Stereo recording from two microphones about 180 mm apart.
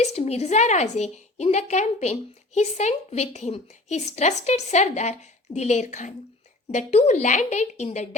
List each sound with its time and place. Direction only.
0.0 s a woman's voice: 35° left (ahead or behind)